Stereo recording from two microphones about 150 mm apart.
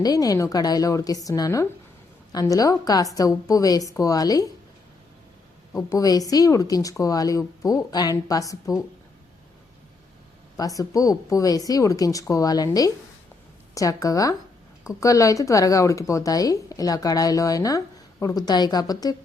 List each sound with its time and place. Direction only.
0.0 s speech: 25° left (ahead or behind)
5.7 s speech: 25° left (ahead or behind)
10.6 s speech: 20° left (ahead or behind)